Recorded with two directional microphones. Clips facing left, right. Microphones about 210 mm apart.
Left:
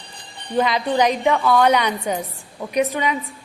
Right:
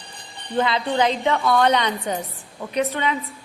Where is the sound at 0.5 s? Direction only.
15° left (ahead or behind).